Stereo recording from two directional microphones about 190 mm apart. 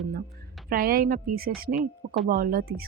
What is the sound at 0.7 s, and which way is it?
Speech, 50° right (ahead or behind).